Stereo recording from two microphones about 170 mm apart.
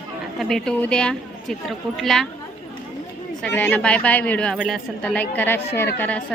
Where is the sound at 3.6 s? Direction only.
5° left (ahead or behind).